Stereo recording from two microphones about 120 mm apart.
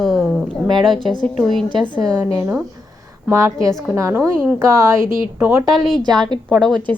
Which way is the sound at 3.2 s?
25° right (ahead or behind).